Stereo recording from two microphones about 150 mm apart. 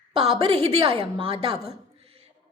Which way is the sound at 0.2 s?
40° right (ahead or behind).